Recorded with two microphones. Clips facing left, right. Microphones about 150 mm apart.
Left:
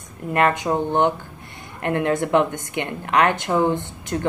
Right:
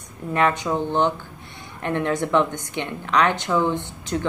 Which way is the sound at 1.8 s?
60° left (ahead or behind).